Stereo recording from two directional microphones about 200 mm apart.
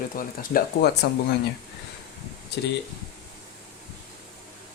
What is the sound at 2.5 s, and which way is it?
Speech, 55° left (ahead or behind).